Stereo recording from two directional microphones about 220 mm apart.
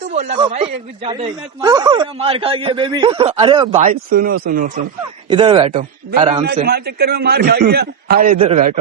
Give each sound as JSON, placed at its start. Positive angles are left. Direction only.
{"t": 0.0, "sound": "a sound", "side_deg": -35}
{"t": 0.3, "sound": "speech", "side_deg": -25}
{"t": 3.8, "sound": "a man's voice", "side_deg": -40}
{"t": 5.3, "sound": "speech", "side_deg": -20}
{"t": 6.7, "sound": "a man's voice", "side_deg": -45}